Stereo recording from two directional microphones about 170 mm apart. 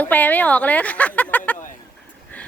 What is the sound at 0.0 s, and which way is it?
A woman's voice, 10° left (ahead or behind).